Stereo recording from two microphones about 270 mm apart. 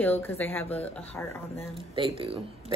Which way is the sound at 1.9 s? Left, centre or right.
Centre.